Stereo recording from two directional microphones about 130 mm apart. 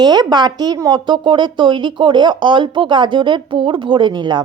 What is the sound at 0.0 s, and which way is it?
A woman's voice, 30° right (ahead or behind).